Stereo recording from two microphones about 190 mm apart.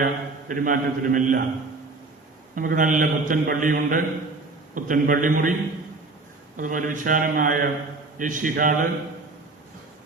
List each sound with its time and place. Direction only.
0.0 s a man's voice: 45° right (ahead or behind)
2.6 s a man's voice: 45° right (ahead or behind)
6.6 s a man's voice: 45° right (ahead or behind)